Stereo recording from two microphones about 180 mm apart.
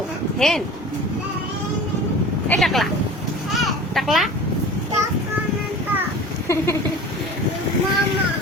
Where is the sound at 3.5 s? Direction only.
Centre (ahead or behind).